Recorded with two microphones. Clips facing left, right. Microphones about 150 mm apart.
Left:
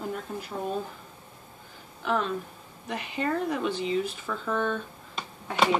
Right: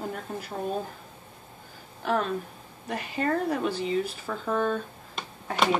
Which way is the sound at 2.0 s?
45° right (ahead or behind).